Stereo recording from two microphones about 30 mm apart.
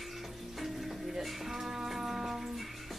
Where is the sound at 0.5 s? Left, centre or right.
Centre.